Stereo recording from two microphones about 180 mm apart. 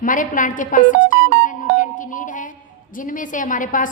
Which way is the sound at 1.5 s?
45° left (ahead or behind).